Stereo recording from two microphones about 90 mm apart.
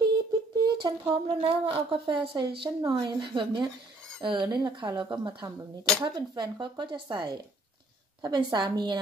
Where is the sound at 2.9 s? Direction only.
55° right (ahead or behind).